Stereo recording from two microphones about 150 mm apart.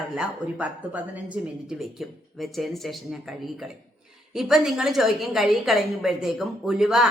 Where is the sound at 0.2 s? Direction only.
5° right (ahead or behind).